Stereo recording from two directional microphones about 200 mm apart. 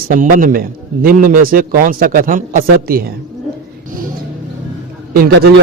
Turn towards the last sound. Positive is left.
turn(degrees=-50)  # may be behind; listen again after turning